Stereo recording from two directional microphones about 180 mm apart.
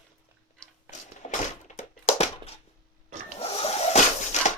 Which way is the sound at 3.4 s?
35° left (ahead or behind).